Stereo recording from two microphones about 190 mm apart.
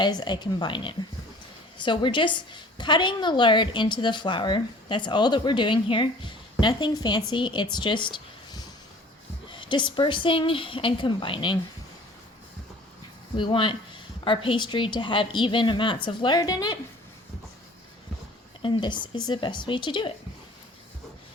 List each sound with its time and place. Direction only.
0.0 s a woman's voice: 20° left (ahead or behind)
13.3 s a woman's voice: 25° left (ahead or behind)
18.6 s a woman's voice: 25° left (ahead or behind)